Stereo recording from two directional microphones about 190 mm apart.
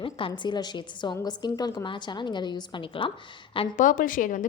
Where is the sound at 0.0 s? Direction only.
25° left (ahead or behind).